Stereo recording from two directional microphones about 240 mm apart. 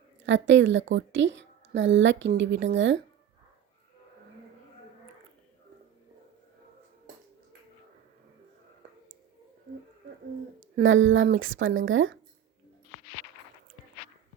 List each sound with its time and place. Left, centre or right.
0.3 s a woman's voice: right
10.6 s speech: right